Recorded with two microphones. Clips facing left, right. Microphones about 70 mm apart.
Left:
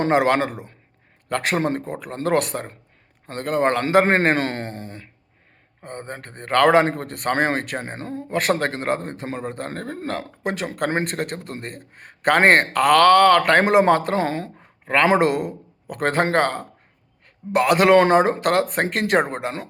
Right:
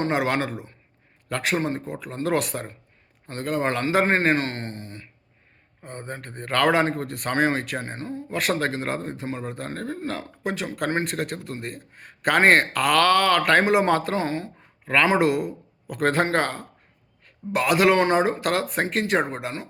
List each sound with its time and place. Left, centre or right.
0.0 s a man's voice: left
14.8 s a man's voice: left